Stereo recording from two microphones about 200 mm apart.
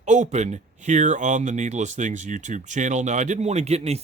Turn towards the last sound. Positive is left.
turn(degrees=-30)  # may be behind; listen again after turning